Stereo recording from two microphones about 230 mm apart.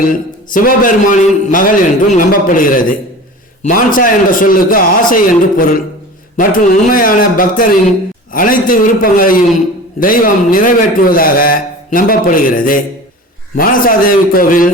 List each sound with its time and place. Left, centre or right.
0.1 s a man's voice: left